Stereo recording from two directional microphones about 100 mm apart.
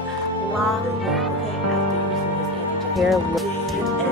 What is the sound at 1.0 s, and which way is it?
Speech, centre (ahead or behind).